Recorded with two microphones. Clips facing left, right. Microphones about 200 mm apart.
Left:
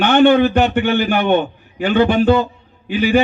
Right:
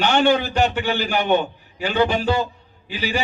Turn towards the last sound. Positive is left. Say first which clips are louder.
# left 10 dB
turn(degrees=55)  # may be behind; listen again after turning